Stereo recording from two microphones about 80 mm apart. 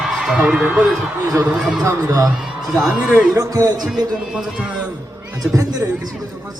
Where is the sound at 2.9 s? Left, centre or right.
Centre.